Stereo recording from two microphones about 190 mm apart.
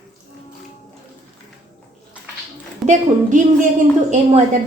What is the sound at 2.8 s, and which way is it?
Speech, 40° right (ahead or behind).